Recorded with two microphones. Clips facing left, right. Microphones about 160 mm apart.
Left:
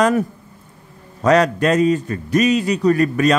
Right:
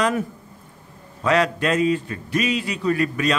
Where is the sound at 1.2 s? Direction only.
40° left (ahead or behind).